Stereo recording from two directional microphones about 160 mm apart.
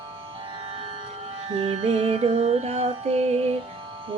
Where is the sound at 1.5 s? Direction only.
40° right (ahead or behind).